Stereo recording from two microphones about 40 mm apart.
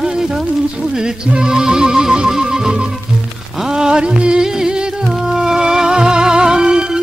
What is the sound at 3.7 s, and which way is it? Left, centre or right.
Music, right.